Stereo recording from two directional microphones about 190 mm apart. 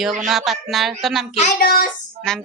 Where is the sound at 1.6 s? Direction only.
50° left (ahead or behind).